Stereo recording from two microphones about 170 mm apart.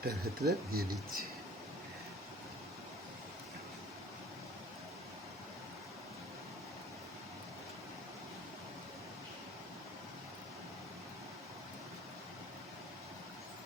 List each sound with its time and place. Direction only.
0.0 s speech: 65° right (ahead or behind)